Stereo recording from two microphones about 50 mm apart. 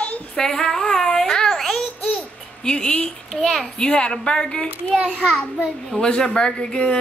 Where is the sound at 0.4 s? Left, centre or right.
Centre.